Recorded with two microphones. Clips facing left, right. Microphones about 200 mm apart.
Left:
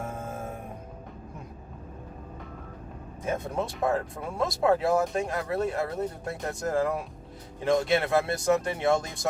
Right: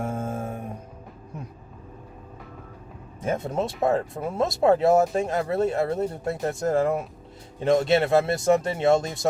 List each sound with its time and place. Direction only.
0.0 s music: 25° right (ahead or behind)
3.2 s speech: 25° right (ahead or behind)